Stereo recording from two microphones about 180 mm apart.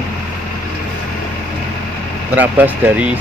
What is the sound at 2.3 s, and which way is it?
Speech, 10° right (ahead or behind).